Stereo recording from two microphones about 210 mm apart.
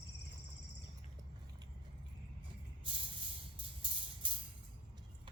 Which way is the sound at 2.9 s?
25° right (ahead or behind).